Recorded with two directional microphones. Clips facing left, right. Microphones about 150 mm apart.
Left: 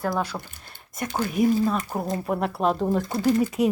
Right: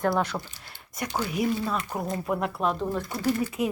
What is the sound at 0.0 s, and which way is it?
Speech, 5° left (ahead or behind).